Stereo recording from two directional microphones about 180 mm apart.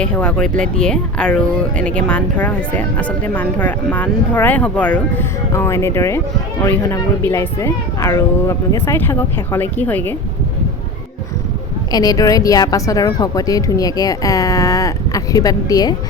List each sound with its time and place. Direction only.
0.0 s speech: 5° left (ahead or behind)
11.9 s speech: 20° left (ahead or behind)